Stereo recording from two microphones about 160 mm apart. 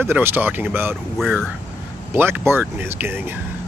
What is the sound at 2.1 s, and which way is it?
Speech, 15° right (ahead or behind).